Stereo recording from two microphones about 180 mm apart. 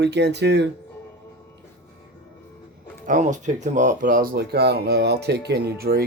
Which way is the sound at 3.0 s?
45° right (ahead or behind).